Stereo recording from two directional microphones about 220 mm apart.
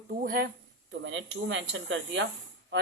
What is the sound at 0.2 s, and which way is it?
Speech, 40° right (ahead or behind).